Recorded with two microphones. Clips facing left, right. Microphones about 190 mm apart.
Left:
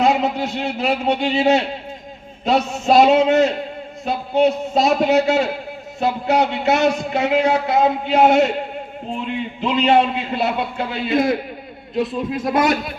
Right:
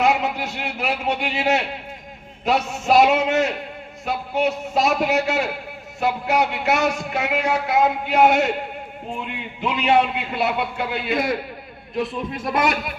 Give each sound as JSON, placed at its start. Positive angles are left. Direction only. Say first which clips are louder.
{"t": 0.0, "sound": "a man's voice", "louder": "left 3 dB", "side_deg": 30}
{"t": 9.8, "sound": "a man's voice", "louder": "left 2 dB", "side_deg": 25}